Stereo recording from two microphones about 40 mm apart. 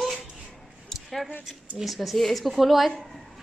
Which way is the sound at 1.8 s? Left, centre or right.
Centre.